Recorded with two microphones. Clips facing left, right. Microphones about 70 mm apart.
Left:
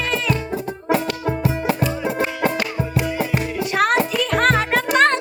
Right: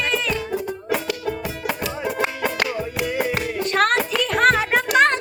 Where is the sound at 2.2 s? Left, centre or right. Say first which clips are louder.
Left 2 dB; right.